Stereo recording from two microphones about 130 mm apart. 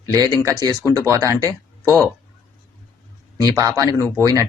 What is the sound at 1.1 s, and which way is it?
Speech, 25° right (ahead or behind).